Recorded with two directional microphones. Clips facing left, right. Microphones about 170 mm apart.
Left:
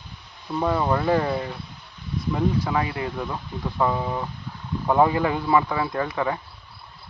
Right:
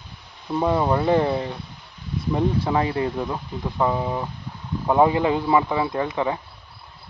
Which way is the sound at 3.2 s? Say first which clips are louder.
Right 2 dB; 15° right (ahead or behind).